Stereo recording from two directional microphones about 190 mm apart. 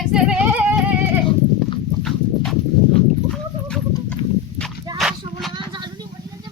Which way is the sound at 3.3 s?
5° left (ahead or behind).